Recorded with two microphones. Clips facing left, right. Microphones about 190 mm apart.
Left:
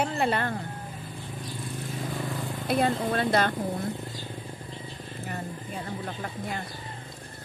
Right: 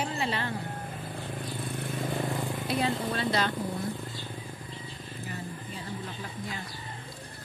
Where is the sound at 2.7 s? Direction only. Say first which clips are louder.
Left 5 dB; 50° left (ahead or behind).